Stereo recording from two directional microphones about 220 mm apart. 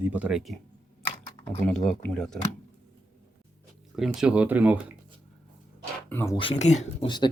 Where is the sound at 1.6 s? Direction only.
5° left (ahead or behind).